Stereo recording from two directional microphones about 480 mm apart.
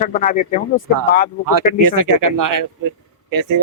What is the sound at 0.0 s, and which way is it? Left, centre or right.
Speech, centre.